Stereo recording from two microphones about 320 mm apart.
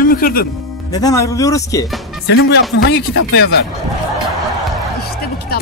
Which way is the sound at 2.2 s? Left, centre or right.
Left.